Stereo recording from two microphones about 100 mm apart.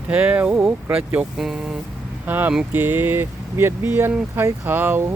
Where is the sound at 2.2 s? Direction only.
20° right (ahead or behind).